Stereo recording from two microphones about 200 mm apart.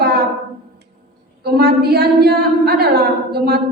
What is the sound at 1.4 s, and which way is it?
A woman's voice, 50° right (ahead or behind).